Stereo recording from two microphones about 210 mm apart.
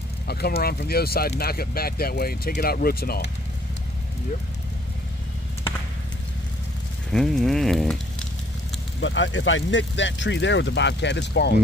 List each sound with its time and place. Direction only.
0.3 s speech: 50° left (ahead or behind)
7.1 s speech: centre (ahead or behind)
9.0 s speech: 65° left (ahead or behind)